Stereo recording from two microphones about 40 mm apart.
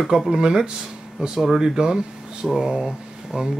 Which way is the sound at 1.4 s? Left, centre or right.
Centre.